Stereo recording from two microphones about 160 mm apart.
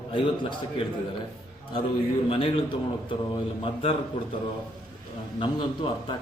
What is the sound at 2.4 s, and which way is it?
Speech, 30° left (ahead or behind).